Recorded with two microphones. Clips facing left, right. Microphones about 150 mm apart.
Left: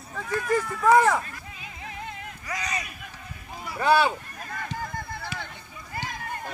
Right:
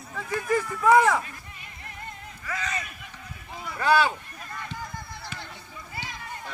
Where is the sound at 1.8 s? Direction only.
90° left.